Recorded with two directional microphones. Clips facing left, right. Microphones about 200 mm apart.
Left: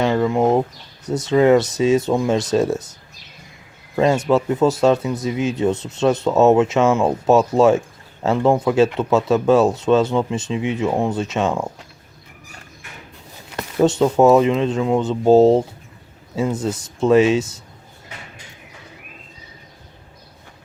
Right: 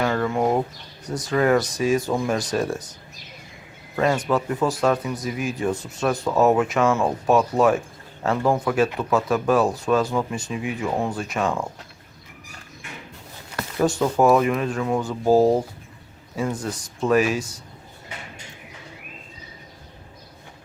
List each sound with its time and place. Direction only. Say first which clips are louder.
0.0 s a sound: left 5 dB; 20° left (ahead or behind)
1.0 s speech: left 6 dB; 25° left (ahead or behind)
3.9 s speech: left 5 dB; 25° left (ahead or behind)
13.6 s speech: left 5 dB; 25° left (ahead or behind)